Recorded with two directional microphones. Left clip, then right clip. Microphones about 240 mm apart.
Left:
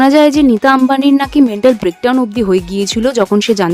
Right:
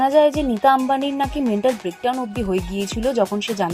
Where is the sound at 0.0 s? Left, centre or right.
Left.